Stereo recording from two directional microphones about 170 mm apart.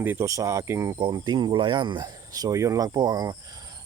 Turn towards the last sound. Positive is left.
turn(degrees=-20)  # may be behind; listen again after turning